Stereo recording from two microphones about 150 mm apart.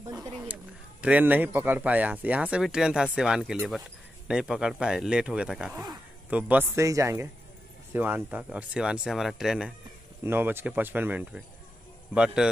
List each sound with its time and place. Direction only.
1.0 s a man's voice: 10° right (ahead or behind)
10.2 s speech: 15° right (ahead or behind)